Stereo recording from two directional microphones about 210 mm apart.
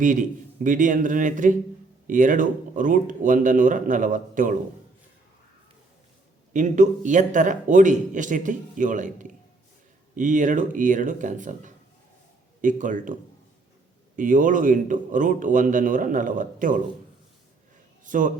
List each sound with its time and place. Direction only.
0.0 s a man's voice: 40° right (ahead or behind)
6.5 s a man's voice: 35° right (ahead or behind)
14.2 s a man's voice: 40° right (ahead or behind)
18.0 s a man's voice: 40° right (ahead or behind)